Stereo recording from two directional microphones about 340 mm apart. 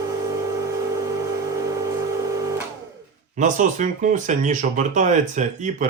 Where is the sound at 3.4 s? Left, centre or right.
Right.